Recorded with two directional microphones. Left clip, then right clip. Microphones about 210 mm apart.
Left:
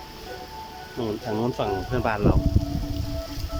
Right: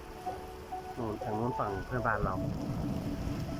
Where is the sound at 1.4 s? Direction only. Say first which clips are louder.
Left 8 dB; 25° left (ahead or behind).